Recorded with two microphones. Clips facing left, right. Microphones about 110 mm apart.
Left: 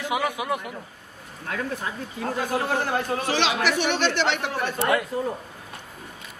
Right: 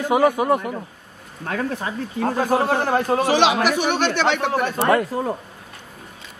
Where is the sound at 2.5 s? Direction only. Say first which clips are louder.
Right 5 dB; 60° right (ahead or behind).